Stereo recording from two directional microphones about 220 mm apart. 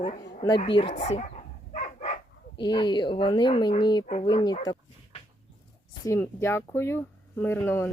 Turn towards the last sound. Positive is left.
turn(degrees=10)  # may be behind; listen again after turning